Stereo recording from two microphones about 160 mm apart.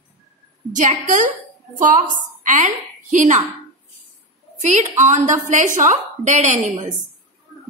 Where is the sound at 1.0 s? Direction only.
55° right (ahead or behind).